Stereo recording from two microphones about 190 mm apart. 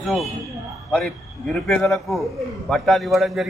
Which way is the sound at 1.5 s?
Centre (ahead or behind).